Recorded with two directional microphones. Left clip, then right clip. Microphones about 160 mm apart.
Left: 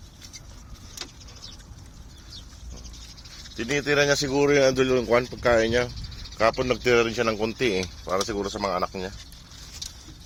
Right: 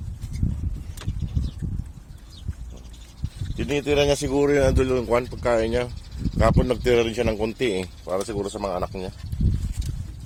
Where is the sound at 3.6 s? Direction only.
25° right (ahead or behind).